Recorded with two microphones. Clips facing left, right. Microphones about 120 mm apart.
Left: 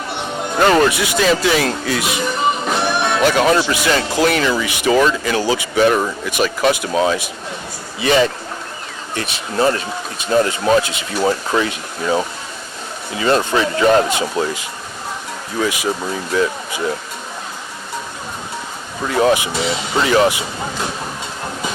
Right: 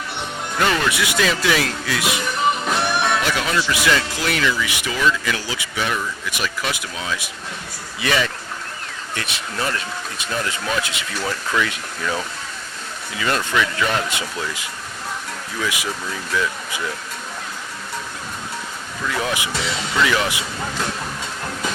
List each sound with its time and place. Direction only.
0.5 s speech: 40° left (ahead or behind)
2.3 s music: centre (ahead or behind)
3.3 s speech: 40° left (ahead or behind)
15.6 s speech: 35° left (ahead or behind)
19.0 s speech: 35° left (ahead or behind)